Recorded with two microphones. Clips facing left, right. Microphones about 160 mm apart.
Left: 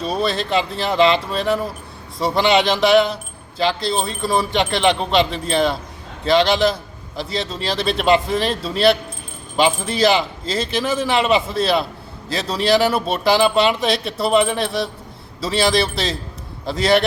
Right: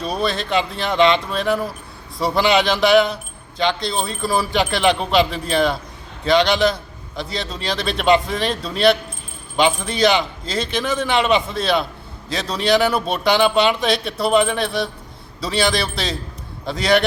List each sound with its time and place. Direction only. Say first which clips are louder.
0.0 s speech: left 1 dB; centre (ahead or behind)